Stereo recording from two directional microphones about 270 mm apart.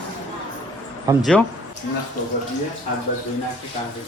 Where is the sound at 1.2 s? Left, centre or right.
Centre.